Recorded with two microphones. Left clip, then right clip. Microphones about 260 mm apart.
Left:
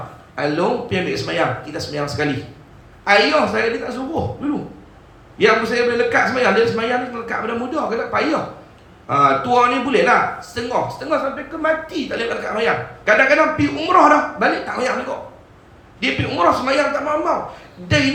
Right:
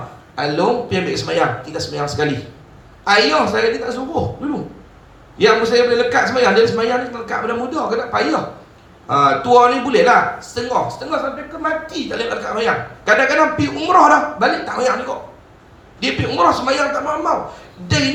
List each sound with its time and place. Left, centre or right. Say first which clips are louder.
0.3 s a man's voice: right 2 dB; right
5.4 s a man's voice: right 3 dB; right